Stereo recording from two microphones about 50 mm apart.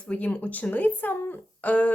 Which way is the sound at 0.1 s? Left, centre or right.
Left.